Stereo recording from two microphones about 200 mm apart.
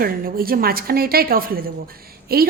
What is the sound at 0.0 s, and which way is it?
A woman's voice, 45° right (ahead or behind).